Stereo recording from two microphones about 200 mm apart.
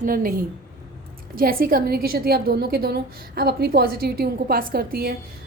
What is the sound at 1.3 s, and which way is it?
A woman's voice, 45° right (ahead or behind).